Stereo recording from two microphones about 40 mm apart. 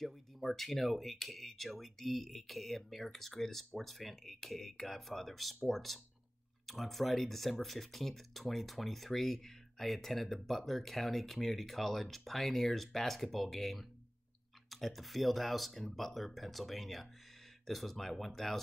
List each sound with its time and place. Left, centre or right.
0.0 s speech: centre